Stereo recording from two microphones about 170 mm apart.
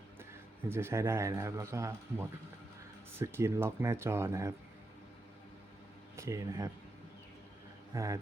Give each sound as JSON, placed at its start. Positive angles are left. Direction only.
{"t": 0.7, "sound": "speech", "side_deg": -15}
{"t": 6.1, "sound": "speech", "side_deg": -15}
{"t": 7.9, "sound": "speech", "side_deg": -20}